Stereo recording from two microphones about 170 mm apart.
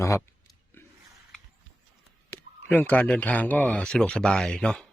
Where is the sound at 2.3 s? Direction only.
10° left (ahead or behind).